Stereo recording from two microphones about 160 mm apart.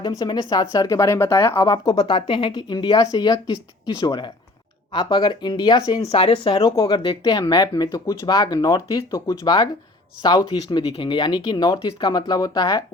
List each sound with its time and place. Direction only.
0.0 s speech: 25° left (ahead or behind)
6.0 s speech: 40° left (ahead or behind)
6.6 s speech: 25° left (ahead or behind)